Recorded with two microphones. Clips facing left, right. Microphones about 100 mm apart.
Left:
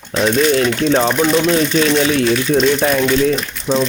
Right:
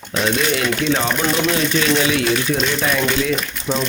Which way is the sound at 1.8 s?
40° left (ahead or behind).